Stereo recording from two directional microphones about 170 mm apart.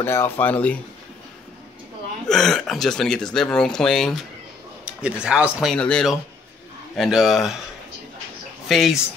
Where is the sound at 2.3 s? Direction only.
5° left (ahead or behind).